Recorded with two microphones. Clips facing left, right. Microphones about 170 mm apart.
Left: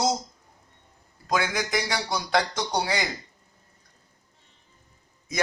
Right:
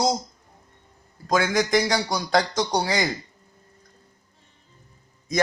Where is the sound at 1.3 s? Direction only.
40° right (ahead or behind).